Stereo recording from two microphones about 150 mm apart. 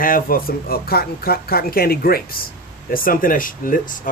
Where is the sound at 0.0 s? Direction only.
70° left (ahead or behind); by 2.4 s 85° left.